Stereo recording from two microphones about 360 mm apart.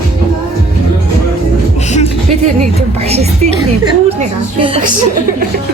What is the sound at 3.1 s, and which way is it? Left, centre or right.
Speech, centre.